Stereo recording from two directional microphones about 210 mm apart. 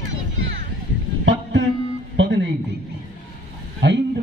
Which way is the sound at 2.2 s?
60° right (ahead or behind).